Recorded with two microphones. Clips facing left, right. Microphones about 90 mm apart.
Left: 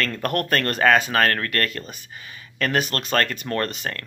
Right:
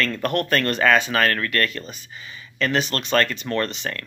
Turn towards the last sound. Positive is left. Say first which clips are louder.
# right 1 dB
turn(degrees=40)  # may be behind; listen again after turning